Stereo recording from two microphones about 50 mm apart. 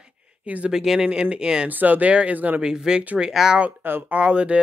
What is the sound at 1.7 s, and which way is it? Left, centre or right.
Speech, right.